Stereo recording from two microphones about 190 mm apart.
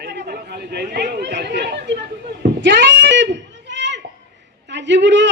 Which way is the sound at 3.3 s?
70° right (ahead or behind).